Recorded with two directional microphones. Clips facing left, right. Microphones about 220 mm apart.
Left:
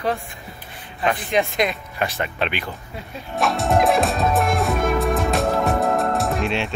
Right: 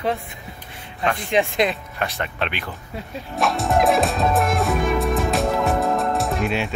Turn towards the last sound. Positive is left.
turn(degrees=0)  # may be behind; listen again after turning